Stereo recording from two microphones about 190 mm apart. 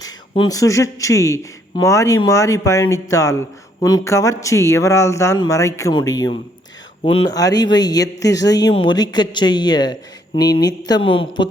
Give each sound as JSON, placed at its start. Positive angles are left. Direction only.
{"t": 0.0, "sound": "speech", "side_deg": 20}